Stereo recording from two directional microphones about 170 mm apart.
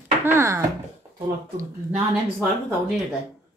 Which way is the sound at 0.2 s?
20° right (ahead or behind).